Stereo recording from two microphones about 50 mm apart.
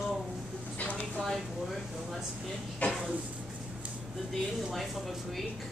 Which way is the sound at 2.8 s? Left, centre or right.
Left.